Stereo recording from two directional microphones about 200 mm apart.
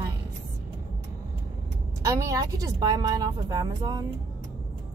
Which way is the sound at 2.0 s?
15° right (ahead or behind).